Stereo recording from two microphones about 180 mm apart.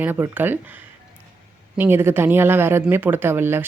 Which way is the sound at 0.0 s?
10° right (ahead or behind).